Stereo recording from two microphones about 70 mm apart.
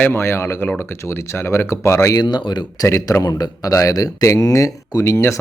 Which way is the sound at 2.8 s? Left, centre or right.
Left.